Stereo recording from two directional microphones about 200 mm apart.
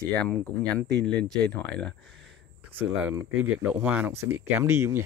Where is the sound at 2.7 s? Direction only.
5° right (ahead or behind).